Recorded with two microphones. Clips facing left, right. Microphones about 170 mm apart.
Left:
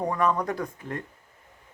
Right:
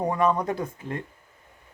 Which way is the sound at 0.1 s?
20° right (ahead or behind).